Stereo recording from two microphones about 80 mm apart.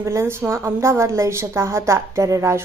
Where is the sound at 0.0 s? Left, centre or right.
Right.